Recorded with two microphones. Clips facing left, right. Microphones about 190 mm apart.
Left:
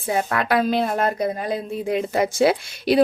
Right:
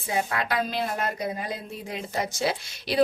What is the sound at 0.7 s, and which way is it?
A woman's voice, 55° left (ahead or behind).